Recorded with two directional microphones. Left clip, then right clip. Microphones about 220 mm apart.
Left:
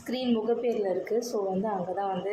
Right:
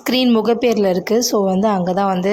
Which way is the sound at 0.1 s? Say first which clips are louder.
Right 12 dB; 40° right (ahead or behind).